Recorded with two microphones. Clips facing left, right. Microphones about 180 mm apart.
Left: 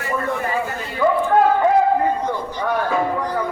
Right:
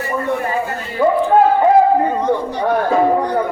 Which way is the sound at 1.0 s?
20° right (ahead or behind).